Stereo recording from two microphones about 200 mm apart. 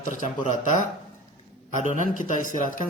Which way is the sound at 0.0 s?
40° left (ahead or behind).